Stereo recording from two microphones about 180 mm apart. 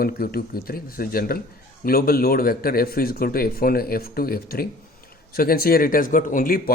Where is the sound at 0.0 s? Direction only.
55° left (ahead or behind).